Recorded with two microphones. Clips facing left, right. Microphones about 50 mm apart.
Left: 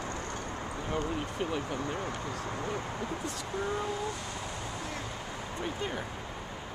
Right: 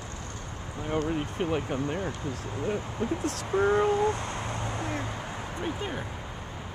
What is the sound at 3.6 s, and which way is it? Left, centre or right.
Speech, right.